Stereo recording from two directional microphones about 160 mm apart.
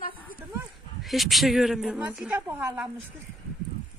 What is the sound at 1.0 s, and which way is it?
A woman's voice, centre (ahead or behind).